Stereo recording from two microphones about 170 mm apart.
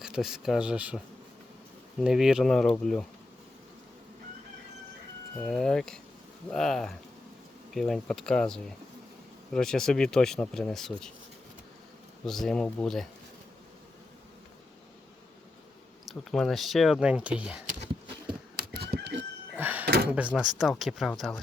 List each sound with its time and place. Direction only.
0.0 s speech: 5° right (ahead or behind)
5.4 s speech: 5° left (ahead or behind)
12.2 s speech: centre (ahead or behind)
16.0 s speech: centre (ahead or behind)
18.7 s a sound: 75° right (ahead or behind)
19.5 s a sound: 10° right (ahead or behind)
19.8 s drawer open or close: 65° right (ahead or behind)
20.1 s speech: 10° right (ahead or behind)